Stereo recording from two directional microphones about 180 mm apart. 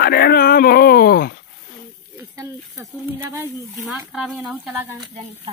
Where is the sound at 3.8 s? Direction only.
Centre (ahead or behind).